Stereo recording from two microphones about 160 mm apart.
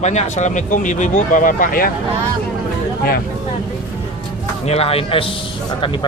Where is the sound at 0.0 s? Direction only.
45° left (ahead or behind).